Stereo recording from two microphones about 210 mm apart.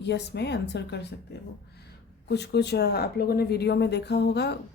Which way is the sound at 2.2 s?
55° left (ahead or behind).